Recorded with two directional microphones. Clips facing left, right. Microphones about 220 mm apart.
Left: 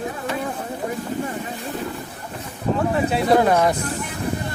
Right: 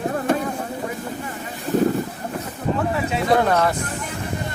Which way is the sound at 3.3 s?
10° left (ahead or behind).